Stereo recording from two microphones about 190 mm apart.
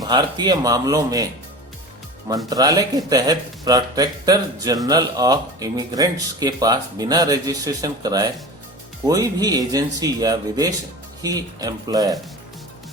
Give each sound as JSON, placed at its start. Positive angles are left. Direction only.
{"t": 0.0, "sound": "speech", "side_deg": -20}
{"t": 2.5, "sound": "speech", "side_deg": -20}